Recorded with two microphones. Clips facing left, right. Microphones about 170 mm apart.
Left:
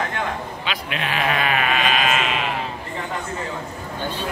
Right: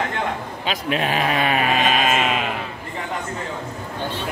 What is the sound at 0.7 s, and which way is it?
Sheep, 40° right (ahead or behind).